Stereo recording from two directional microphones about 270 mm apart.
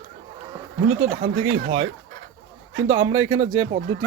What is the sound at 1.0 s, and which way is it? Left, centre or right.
Speech, right.